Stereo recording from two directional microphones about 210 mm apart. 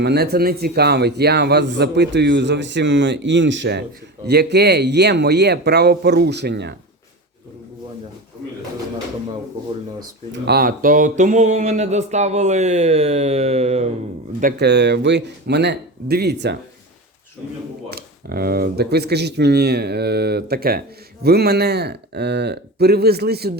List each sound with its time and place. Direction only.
0.0 s a man's voice: 50° right (ahead or behind)
10.0 s speech: 45° right (ahead or behind); by 13.9 s 30° right (ahead or behind)
14.4 s a man's voice: 50° right (ahead or behind)
17.9 s a man's voice: 45° right (ahead or behind)